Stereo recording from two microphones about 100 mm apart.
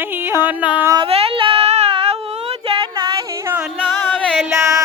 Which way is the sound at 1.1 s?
75° right (ahead or behind).